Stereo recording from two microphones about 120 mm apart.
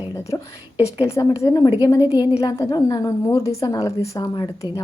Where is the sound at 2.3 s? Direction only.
25° left (ahead or behind).